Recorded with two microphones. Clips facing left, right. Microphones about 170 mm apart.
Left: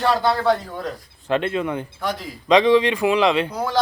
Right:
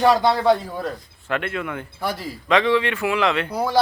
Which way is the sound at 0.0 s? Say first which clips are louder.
Right 4 dB; 15° right (ahead or behind).